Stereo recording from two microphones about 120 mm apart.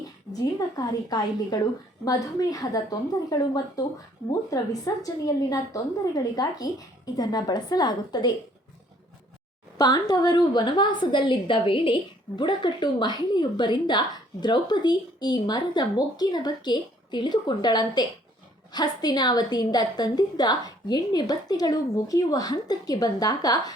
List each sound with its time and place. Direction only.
0.4 s a woman's voice: 30° left (ahead or behind)
9.7 s a woman's voice: 30° left (ahead or behind)